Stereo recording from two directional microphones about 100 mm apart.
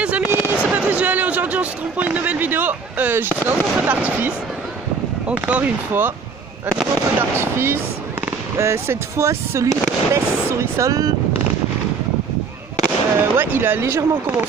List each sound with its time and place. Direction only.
0.0 s fireworks: 15° right (ahead or behind)
5.3 s speech: 15° right (ahead or behind)
7.2 s speech: 25° right (ahead or behind)
13.1 s speech: 25° right (ahead or behind)